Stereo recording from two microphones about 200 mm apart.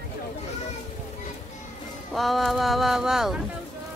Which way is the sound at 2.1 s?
Centre (ahead or behind).